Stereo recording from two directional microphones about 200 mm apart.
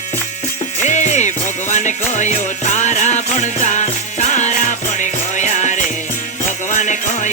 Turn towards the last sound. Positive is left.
turn(degrees=35)  # may be behind; listen again after turning